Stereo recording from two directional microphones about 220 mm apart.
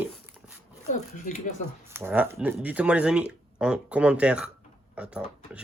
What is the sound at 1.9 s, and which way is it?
Speech, 10° right (ahead or behind).